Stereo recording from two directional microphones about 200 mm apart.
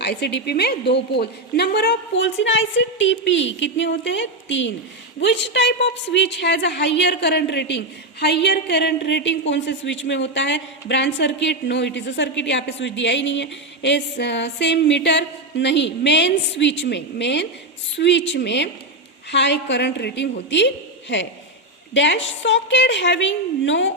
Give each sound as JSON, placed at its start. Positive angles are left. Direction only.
{"t": 0.0, "sound": "speech", "side_deg": 55}